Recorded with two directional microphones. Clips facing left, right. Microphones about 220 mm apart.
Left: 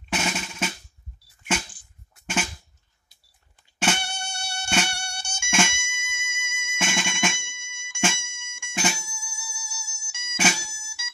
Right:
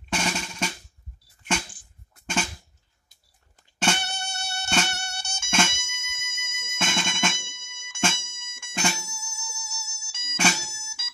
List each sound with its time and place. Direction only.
0.1 s drum: 5° left (ahead or behind)
3.8 s mosquito: 10° left (ahead or behind)
10.8 s music: 10° left (ahead or behind)